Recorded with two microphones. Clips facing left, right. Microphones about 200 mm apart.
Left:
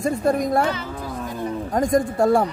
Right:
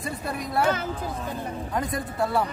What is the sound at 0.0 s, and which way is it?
Speech, 45° left (ahead or behind).